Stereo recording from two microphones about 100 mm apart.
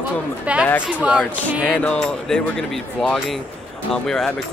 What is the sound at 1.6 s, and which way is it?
A woman's voice, 10° left (ahead or behind).